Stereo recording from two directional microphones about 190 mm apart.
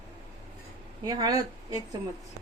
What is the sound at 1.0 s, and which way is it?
Speech, 20° right (ahead or behind).